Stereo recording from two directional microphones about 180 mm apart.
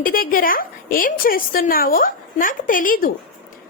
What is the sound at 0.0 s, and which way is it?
A woman's voice, 50° left (ahead or behind).